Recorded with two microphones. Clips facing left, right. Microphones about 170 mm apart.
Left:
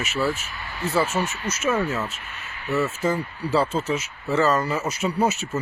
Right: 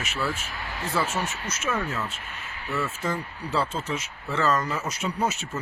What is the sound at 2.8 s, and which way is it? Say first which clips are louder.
Speech: left 6 dB; 10° left (ahead or behind).